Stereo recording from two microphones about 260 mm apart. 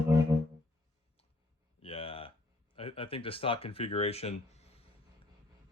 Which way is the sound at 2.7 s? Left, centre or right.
Left.